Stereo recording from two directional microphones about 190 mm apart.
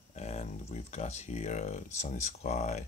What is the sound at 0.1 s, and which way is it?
Speech, 35° left (ahead or behind).